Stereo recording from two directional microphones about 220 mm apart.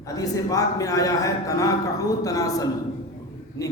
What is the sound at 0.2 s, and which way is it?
A man's voice, 15° left (ahead or behind).